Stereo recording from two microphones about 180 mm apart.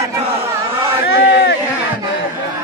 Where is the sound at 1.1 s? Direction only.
75° left (ahead or behind).